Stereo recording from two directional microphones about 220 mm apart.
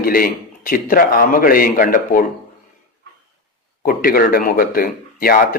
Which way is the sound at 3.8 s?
40° left (ahead or behind).